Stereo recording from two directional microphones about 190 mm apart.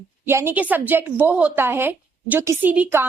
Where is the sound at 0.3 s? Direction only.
10° right (ahead or behind).